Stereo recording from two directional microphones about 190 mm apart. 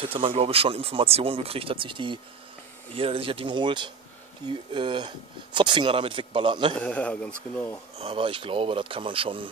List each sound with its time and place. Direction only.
0.0 s speech: 30° right (ahead or behind)
6.7 s a man's voice: 5° left (ahead or behind)
8.0 s speech: 30° right (ahead or behind)